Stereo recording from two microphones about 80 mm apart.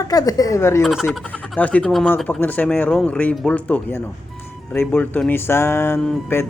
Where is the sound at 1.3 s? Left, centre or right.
Centre.